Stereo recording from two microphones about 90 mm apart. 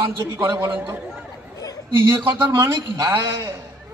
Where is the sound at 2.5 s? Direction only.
30° right (ahead or behind).